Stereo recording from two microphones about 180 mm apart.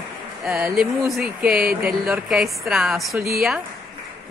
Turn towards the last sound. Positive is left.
turn(degrees=-5)  # may be behind; listen again after turning